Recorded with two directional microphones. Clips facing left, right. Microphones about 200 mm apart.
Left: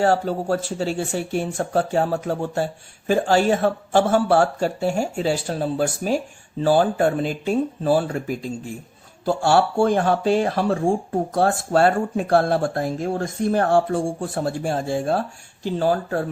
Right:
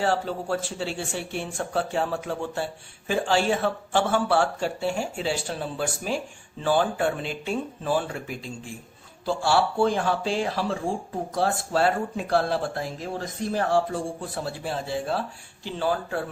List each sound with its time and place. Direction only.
0.0 s speech: 45° left (ahead or behind)